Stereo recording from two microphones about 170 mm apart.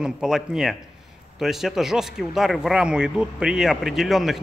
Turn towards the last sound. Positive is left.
turn(degrees=0)  # may be behind; listen again after turning